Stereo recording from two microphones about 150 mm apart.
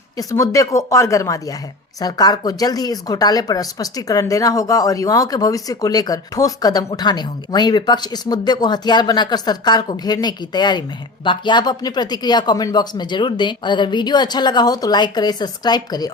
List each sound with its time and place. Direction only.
0.2 s speech: 25° left (ahead or behind)